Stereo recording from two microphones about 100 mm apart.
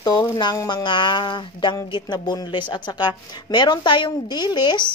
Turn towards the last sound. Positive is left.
turn(degrees=50)  # may be behind; listen again after turning